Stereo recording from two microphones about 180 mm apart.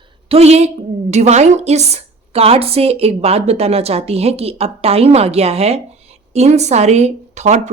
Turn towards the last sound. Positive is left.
turn(degrees=-40)  # may be behind; listen again after turning